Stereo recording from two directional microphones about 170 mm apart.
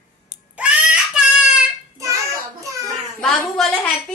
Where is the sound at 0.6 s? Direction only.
5° right (ahead or behind).